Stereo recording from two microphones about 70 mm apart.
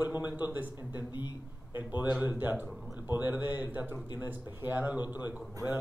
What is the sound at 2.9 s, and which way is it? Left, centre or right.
A man's voice, right.